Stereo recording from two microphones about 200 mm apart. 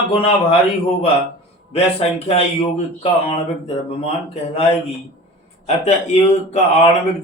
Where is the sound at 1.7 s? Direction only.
30° left (ahead or behind).